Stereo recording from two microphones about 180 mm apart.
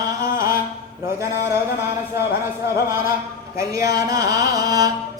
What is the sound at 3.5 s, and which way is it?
Speech, 20° right (ahead or behind).